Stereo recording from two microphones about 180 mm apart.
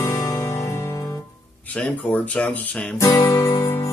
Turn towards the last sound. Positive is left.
turn(degrees=15)  # may be behind; listen again after turning